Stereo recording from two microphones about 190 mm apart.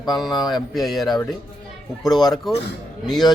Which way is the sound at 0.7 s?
Centre (ahead or behind).